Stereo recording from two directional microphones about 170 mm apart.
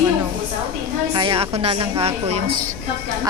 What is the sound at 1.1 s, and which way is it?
Speech, 30° right (ahead or behind).